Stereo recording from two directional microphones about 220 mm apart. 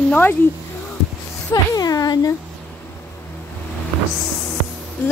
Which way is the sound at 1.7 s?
15° left (ahead or behind).